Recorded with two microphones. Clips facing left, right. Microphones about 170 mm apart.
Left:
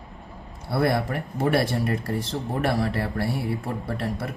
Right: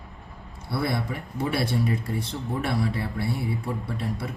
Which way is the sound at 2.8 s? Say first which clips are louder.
Left 2 dB; 70° left (ahead or behind).